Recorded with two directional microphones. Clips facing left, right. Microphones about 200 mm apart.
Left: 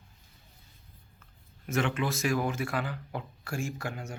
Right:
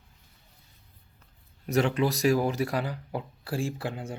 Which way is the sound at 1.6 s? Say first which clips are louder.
Right 5 dB; 35° right (ahead or behind).